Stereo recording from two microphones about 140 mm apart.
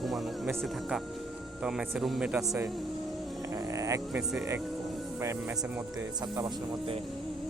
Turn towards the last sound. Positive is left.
turn(degrees=-30)  # may be behind; listen again after turning